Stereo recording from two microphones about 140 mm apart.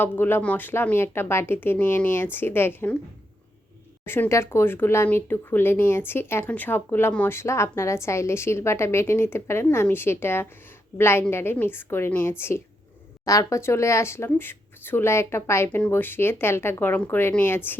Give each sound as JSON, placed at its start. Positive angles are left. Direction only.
{"t": 0.0, "sound": "speech", "side_deg": 15}
{"t": 4.0, "sound": "speech", "side_deg": 15}